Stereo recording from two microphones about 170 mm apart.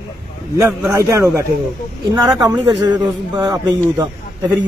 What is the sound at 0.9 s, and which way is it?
A man's voice, 20° right (ahead or behind).